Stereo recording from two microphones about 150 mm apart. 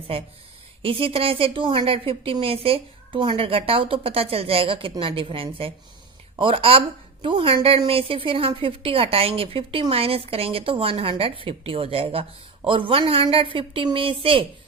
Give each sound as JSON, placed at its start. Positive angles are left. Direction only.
{"t": 0.8, "sound": "a woman's voice", "side_deg": -35}